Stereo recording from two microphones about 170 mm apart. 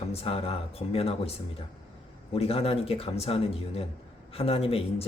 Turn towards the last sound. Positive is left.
turn(degrees=35)  # may be behind; listen again after turning